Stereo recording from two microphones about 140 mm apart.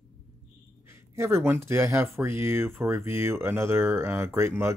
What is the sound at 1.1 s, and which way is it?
Speech, 20° right (ahead or behind).